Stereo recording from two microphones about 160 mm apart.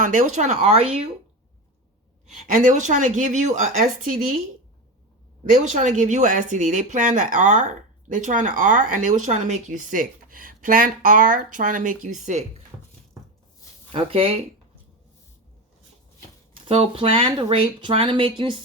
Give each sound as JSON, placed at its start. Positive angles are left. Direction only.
{"t": 0.0, "sound": "speech", "side_deg": -55}
{"t": 2.6, "sound": "speech", "side_deg": -50}
{"t": 5.5, "sound": "speech", "side_deg": -50}
{"t": 13.9, "sound": "speech", "side_deg": -35}
{"t": 16.6, "sound": "speech", "side_deg": -35}